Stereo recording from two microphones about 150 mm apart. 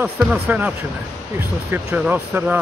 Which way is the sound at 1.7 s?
10° right (ahead or behind).